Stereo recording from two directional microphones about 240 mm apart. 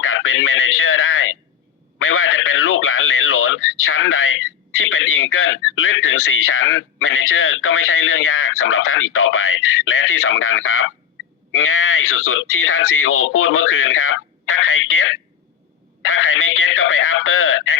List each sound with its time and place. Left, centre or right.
0.0 s speech: left
2.0 s radio: left
4.8 s speech: left